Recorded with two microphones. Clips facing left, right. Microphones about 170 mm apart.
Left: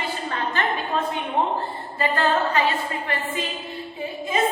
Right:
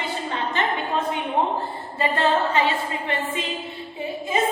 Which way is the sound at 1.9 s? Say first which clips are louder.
Right 1 dB; 25° right (ahead or behind).